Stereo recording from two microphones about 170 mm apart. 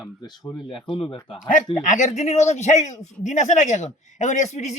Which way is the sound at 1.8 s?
45° left (ahead or behind).